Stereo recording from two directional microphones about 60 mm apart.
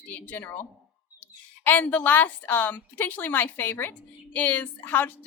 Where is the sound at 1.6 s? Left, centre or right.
Left.